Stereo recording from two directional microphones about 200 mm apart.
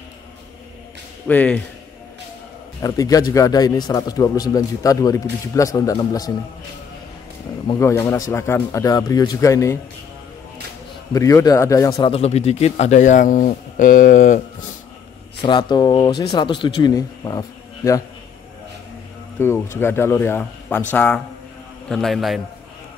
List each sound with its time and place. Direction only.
1.2 s a man's voice: 5° left (ahead or behind)
2.8 s a man's voice: 15° left (ahead or behind)
7.6 s a man's voice: 15° left (ahead or behind)
11.1 s a man's voice: 15° left (ahead or behind); by 14.4 s 40° left (ahead or behind)
15.4 s speech: 20° left (ahead or behind)
19.4 s a man's voice: 10° left (ahead or behind)